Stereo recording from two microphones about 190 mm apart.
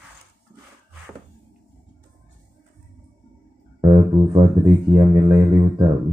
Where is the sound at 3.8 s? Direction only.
25° right (ahead or behind).